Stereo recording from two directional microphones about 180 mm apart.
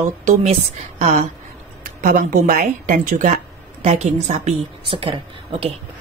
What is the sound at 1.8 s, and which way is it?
A woman's voice, 50° right (ahead or behind).